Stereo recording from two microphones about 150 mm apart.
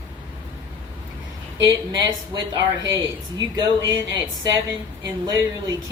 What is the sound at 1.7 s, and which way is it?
Speech, 20° right (ahead or behind).